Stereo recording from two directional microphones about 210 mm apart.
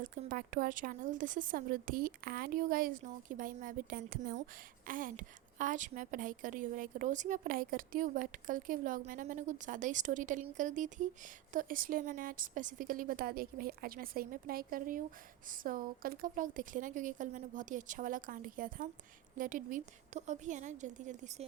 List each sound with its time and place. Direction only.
0.0 s a woman's voice: 40° right (ahead or behind)